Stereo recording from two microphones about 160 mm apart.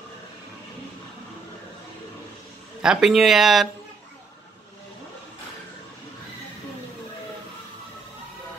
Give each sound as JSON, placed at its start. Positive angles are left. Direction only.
{"t": 2.8, "sound": "speech", "side_deg": -5}